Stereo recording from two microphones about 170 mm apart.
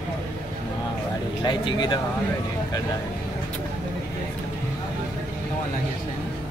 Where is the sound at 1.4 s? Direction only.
25° left (ahead or behind).